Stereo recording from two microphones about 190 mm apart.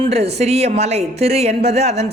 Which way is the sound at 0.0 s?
35° right (ahead or behind).